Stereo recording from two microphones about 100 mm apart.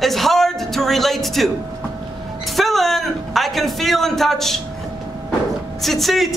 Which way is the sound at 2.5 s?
Centre (ahead or behind).